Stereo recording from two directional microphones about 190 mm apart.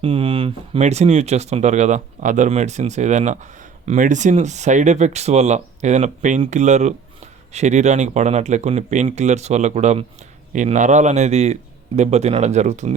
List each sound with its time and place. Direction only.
0.0 s speech: 30° right (ahead or behind)